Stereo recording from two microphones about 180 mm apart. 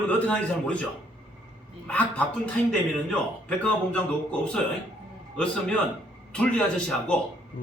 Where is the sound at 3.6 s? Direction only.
5° left (ahead or behind).